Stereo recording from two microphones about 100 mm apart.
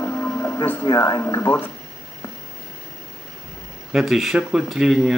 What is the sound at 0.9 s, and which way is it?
Speech, 35° left (ahead or behind).